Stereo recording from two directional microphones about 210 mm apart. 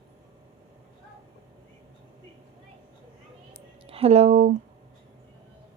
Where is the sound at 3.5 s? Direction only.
30° right (ahead or behind).